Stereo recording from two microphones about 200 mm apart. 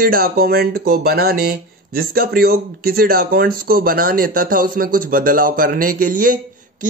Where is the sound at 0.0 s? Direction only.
45° right (ahead or behind).